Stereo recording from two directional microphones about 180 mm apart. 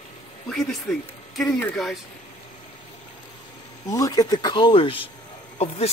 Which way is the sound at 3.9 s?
20° left (ahead or behind).